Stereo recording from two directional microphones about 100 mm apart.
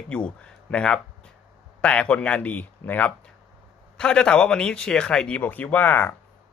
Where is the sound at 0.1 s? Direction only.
10° left (ahead or behind).